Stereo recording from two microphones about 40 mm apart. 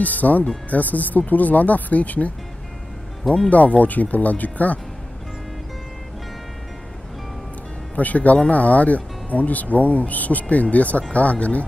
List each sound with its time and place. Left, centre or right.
0.0 s speech: left
3.4 s speech: left
7.9 s speech: left